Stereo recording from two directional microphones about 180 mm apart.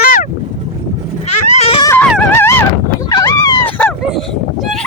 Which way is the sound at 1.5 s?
35° left (ahead or behind).